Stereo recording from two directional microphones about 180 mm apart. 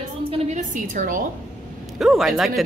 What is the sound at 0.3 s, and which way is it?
Speech, 40° right (ahead or behind).